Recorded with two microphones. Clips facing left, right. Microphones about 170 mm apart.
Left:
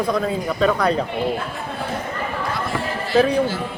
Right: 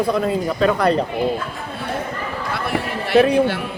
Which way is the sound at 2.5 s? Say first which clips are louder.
Right 1 dB; 65° right (ahead or behind).